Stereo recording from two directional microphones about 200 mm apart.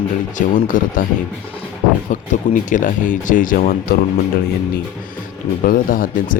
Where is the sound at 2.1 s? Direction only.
40° left (ahead or behind).